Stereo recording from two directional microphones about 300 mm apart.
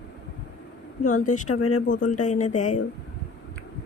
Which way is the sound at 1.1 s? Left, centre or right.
Left.